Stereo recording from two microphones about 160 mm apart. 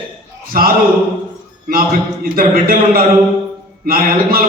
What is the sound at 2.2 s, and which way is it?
A man's voice, 65° right (ahead or behind).